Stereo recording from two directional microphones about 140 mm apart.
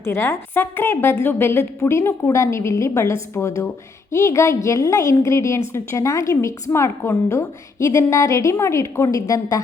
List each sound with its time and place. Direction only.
0.0 s a woman's voice: 20° left (ahead or behind)